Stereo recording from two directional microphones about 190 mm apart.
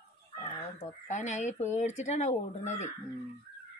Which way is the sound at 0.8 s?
40° left (ahead or behind).